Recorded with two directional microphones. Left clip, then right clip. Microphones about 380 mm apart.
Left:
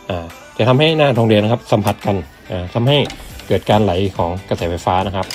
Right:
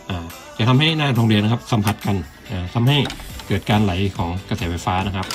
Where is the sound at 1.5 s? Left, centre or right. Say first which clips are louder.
Left 7 dB; left.